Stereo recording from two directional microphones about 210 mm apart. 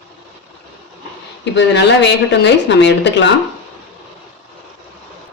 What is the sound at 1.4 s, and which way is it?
A woman's voice, 55° left (ahead or behind).